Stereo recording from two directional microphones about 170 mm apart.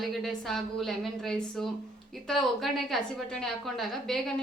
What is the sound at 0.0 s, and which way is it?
A woman's voice, centre (ahead or behind).